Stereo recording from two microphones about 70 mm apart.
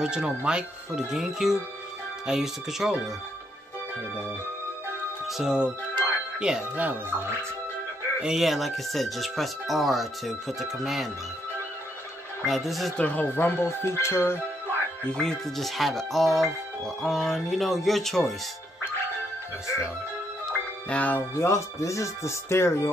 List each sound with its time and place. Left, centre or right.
0.0 s speech: centre
5.2 s music: centre
6.8 s speech: right
8.2 s speech: centre
12.4 s speech: centre
12.9 s speech: left
15.0 s speech: centre
20.9 s music: left
21.4 s speech: left